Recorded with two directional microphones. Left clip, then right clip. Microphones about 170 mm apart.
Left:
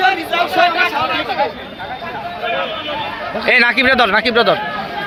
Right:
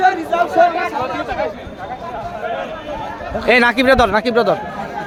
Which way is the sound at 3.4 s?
15° right (ahead or behind).